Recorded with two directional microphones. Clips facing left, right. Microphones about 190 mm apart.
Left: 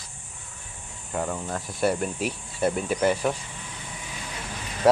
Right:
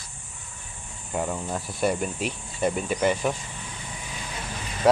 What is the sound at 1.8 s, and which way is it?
Speech, 5° left (ahead or behind).